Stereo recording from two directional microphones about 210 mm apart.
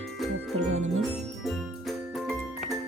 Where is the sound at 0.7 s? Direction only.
70° right (ahead or behind).